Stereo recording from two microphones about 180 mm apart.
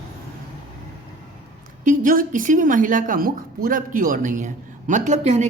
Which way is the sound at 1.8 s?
45° right (ahead or behind).